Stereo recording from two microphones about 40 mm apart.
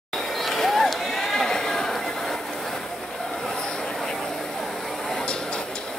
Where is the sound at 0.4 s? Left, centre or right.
Centre.